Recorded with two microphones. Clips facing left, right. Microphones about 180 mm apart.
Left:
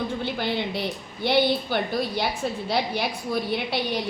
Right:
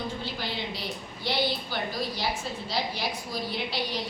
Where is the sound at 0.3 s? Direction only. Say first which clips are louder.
Left 7 dB; 60° left (ahead or behind).